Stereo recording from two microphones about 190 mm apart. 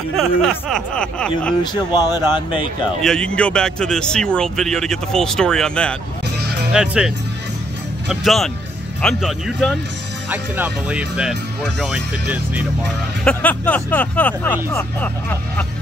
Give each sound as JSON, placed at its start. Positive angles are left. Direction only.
{"t": 0.1, "sound": "a man's voice", "side_deg": 0}
{"t": 1.6, "sound": "speech", "side_deg": 20}
{"t": 3.0, "sound": "a man's voice", "side_deg": 5}
{"t": 8.1, "sound": "a man's voice", "side_deg": 0}
{"t": 10.3, "sound": "a man's voice", "side_deg": -10}
{"t": 13.2, "sound": "speech", "side_deg": 5}